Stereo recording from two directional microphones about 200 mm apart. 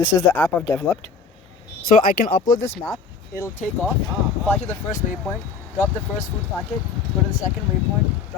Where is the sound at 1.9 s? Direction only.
45° left (ahead or behind).